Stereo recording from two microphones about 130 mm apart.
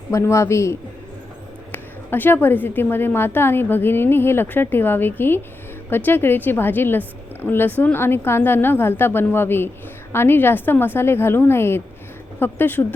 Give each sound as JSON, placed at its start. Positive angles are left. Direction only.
{"t": 0.1, "sound": "a man's voice", "side_deg": 20}